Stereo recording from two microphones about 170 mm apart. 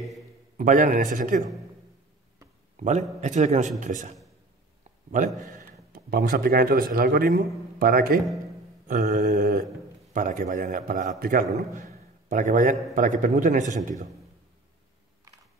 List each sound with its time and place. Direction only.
0.6 s a man's voice: 50° right (ahead or behind)
2.8 s a man's voice: 45° right (ahead or behind)
5.1 s speech: 50° right (ahead or behind)
8.8 s mantra: 55° right (ahead or behind)
10.1 s a man's voice: 50° right (ahead or behind)